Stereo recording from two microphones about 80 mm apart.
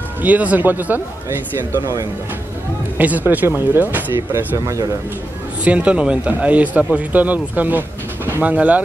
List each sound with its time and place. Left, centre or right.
0.2 s speech: centre
3.0 s speech: right
4.3 s speech: right
5.6 s speech: centre